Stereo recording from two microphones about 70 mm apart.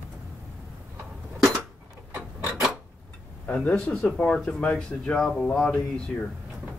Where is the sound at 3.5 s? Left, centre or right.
Centre.